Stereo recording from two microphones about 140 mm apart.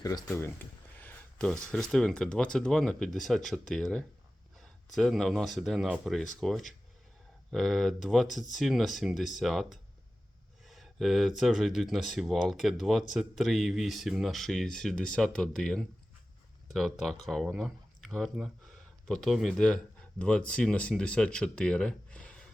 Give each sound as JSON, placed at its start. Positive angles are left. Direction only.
{"t": 0.0, "sound": "speech", "side_deg": 25}
{"t": 0.9, "sound": "a sound", "side_deg": 15}
{"t": 1.7, "sound": "speech", "side_deg": 5}